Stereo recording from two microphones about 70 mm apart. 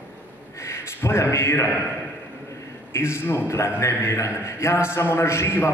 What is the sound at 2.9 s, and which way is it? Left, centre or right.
A man's voice, left.